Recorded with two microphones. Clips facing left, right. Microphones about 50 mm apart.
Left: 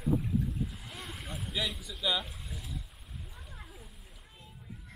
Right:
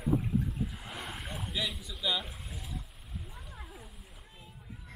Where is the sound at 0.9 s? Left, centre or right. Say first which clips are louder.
Right 2 dB; centre.